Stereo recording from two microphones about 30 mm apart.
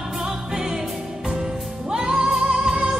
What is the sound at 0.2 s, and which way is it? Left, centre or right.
Music, centre.